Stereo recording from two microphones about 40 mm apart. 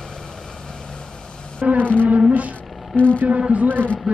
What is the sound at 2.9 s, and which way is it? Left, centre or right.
Speech, left.